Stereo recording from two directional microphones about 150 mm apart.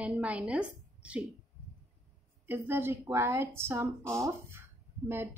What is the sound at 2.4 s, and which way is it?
Speech, 15° right (ahead or behind).